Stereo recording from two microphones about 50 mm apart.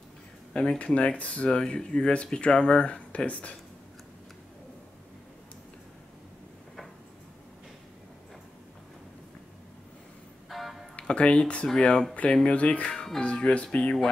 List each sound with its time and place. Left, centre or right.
0.5 s speech: centre
10.5 s music: centre
11.0 s speech: left
12.4 s speech: left
12.9 s speech: centre
13.2 s speech: left